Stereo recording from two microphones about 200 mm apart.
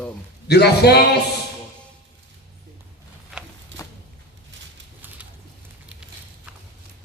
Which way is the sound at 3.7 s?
65° right (ahead or behind).